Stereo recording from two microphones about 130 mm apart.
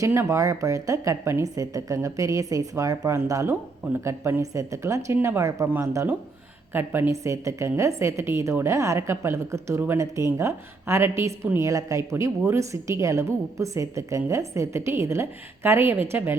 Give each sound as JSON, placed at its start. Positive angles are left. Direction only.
{"t": 0.0, "sound": "a woman's voice", "side_deg": -20}